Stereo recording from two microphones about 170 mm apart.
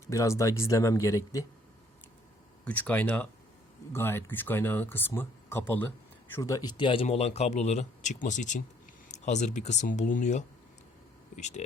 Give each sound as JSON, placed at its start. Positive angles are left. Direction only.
{"t": 0.1, "sound": "speech", "side_deg": 20}
{"t": 2.6, "sound": "speech", "side_deg": 10}